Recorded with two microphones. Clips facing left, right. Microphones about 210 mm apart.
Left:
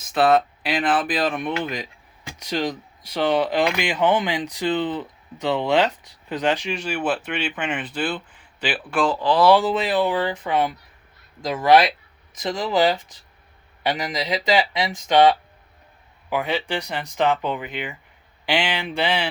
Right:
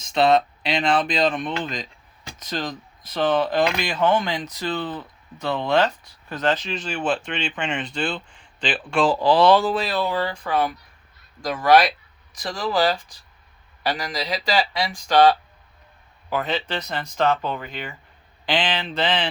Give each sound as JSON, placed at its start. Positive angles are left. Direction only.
{"t": 0.0, "sound": "speech", "side_deg": 5}
{"t": 9.0, "sound": "speech", "side_deg": -35}
{"t": 9.4, "sound": "speech", "side_deg": 15}